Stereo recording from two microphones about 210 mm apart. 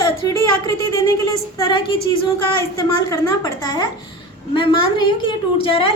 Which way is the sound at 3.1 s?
20° left (ahead or behind).